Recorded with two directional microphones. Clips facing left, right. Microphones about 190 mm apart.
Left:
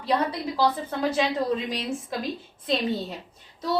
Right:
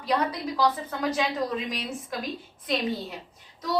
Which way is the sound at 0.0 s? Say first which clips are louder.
Left 1 dB; 30° left (ahead or behind).